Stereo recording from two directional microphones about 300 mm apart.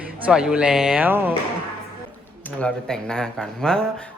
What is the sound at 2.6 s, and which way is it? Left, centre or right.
Speech, centre.